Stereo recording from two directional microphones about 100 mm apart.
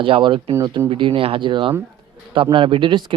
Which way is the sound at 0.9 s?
65° right (ahead or behind).